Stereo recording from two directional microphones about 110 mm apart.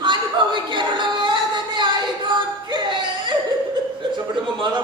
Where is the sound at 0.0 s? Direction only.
45° right (ahead or behind).